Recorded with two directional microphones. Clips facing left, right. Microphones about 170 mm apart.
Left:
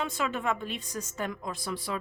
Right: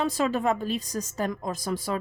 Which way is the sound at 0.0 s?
35° right (ahead or behind).